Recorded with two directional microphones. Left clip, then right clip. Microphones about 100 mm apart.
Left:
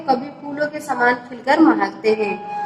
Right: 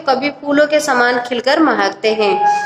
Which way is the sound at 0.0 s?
50° right (ahead or behind).